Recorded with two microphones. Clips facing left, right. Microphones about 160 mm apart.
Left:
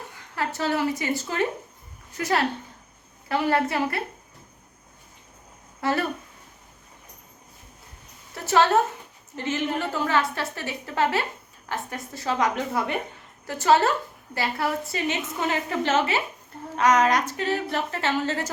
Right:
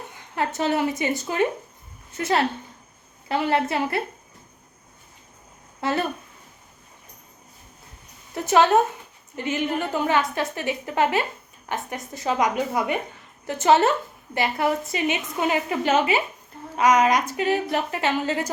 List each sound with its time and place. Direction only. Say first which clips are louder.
0.1 s a woman's voice: right 3 dB; 20° right (ahead or behind)
5.8 s speech: even; 25° right (ahead or behind)
8.4 s a woman's voice: right 2 dB; 15° right (ahead or behind)